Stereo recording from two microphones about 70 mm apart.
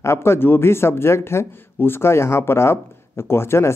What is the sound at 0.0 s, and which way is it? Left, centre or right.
Speech, left.